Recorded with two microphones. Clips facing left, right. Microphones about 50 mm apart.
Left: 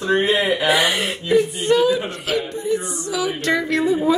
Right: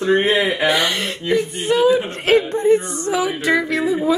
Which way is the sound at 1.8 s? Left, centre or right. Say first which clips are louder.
Right 5 dB; right.